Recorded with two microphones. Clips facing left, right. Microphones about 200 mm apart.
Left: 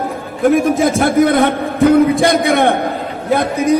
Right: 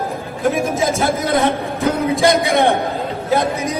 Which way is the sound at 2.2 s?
55° left (ahead or behind).